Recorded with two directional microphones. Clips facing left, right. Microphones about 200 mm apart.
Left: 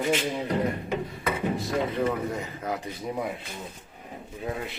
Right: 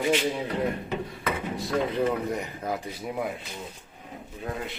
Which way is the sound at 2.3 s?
10° right (ahead or behind).